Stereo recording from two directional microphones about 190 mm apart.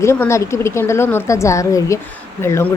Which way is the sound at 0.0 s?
15° left (ahead or behind).